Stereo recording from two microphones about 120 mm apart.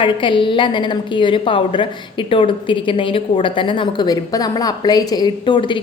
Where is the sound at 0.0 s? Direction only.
45° left (ahead or behind).